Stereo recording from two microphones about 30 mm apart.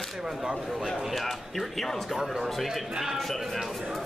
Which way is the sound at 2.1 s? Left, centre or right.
Centre.